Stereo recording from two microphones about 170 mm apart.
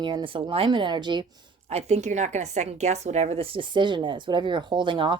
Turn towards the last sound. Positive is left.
turn(degrees=-30)  # may be behind; listen again after turning